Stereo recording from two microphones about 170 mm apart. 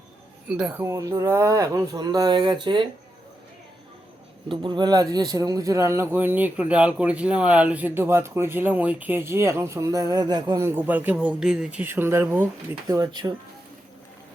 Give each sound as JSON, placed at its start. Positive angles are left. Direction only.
{"t": 0.4, "sound": "speech", "side_deg": -5}
{"t": 4.4, "sound": "a man's voice", "side_deg": -30}
{"t": 12.9, "sound": "speech", "side_deg": -25}